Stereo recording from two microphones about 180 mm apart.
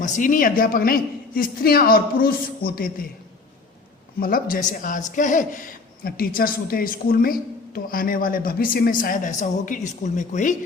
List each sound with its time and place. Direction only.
0.0 s a man's voice: 45° left (ahead or behind)
4.2 s a man's voice: 50° left (ahead or behind)